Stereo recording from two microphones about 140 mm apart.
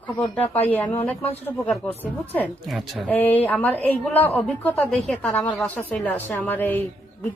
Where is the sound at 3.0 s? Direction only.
10° left (ahead or behind).